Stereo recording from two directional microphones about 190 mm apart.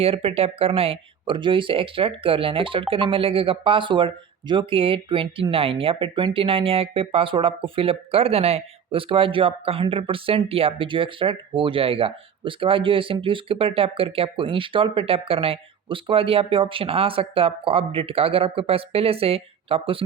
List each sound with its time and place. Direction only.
0.0 s speech: 30° right (ahead or behind)